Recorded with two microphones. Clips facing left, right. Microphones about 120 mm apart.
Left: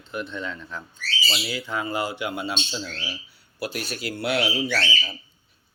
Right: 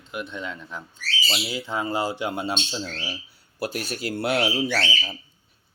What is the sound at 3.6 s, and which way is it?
Speech, 45° right (ahead or behind).